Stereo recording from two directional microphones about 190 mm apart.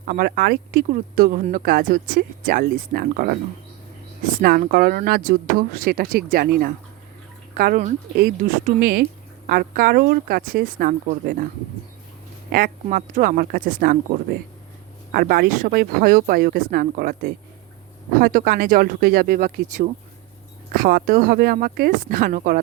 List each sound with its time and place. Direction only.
0.1 s speech: 50° right (ahead or behind)
4.4 s speech: 50° right (ahead or behind)
12.5 s speech: 50° right (ahead or behind)